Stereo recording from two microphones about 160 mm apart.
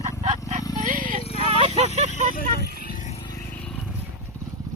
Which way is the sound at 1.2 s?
40° left (ahead or behind).